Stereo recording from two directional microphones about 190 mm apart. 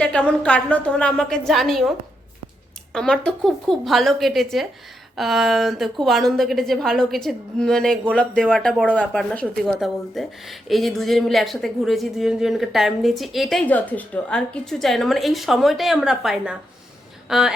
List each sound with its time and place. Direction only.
0.0 s a woman's voice: 5° left (ahead or behind)